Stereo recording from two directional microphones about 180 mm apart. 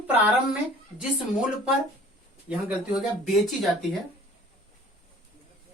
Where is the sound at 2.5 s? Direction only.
5° right (ahead or behind).